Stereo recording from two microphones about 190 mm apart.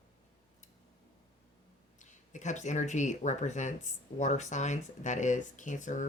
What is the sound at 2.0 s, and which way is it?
Speech, 40° left (ahead or behind).